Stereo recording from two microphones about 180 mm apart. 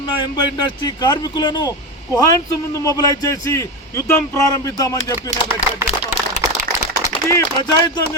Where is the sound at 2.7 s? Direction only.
20° left (ahead or behind).